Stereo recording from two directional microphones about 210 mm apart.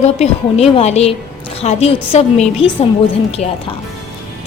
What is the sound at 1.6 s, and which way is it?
Music, 30° left (ahead or behind).